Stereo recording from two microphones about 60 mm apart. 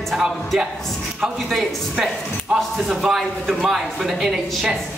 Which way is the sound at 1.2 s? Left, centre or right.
Centre.